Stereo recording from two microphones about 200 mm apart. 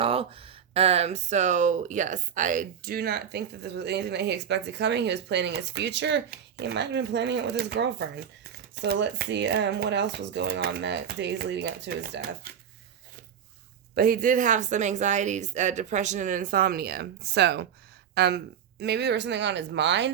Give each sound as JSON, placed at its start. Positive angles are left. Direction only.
{"t": 0.0, "sound": "speech", "side_deg": -30}
{"t": 13.9, "sound": "a woman's voice", "side_deg": -45}